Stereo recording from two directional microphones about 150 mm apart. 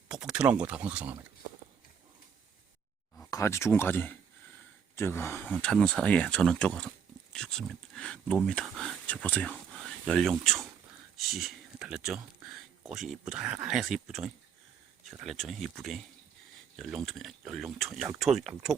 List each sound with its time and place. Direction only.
0.1 s speech: 5° right (ahead or behind)
3.2 s speech: 20° left (ahead or behind)
5.4 s speech: centre (ahead or behind)